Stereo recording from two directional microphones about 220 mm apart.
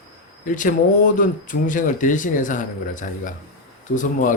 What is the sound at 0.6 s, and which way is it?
Speech, 35° left (ahead or behind).